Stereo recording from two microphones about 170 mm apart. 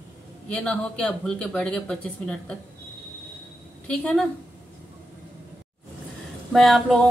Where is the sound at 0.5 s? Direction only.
5° left (ahead or behind).